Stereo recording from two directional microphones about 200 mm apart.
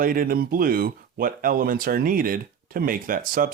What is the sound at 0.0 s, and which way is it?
Speech, 45° right (ahead or behind).